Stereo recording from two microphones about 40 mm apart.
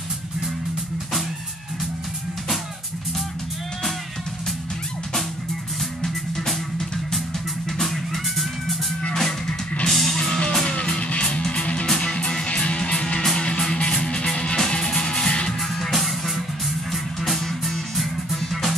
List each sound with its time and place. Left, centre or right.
6.0 s music: centre
7.7 s music: centre
9.8 s music: centre
10.1 s music: centre
15.7 s music: centre